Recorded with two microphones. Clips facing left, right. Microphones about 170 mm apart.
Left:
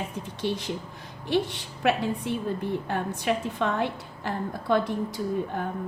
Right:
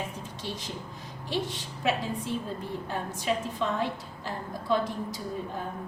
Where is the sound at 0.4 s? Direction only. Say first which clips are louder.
Left 9 dB; 60° left (ahead or behind).